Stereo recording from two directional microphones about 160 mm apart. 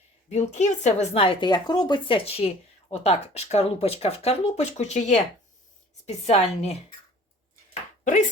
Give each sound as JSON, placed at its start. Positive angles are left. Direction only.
{"t": 0.3, "sound": "speech", "side_deg": 45}